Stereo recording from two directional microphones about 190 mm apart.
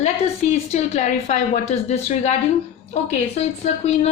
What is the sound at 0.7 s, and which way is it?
Speech, 35° left (ahead or behind).